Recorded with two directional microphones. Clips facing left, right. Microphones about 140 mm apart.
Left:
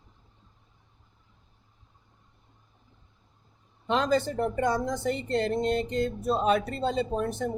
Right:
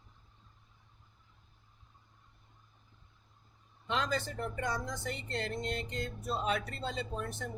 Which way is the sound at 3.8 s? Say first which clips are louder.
Left 9 dB; 30° left (ahead or behind).